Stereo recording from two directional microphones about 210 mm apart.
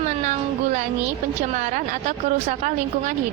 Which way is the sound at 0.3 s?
35° right (ahead or behind).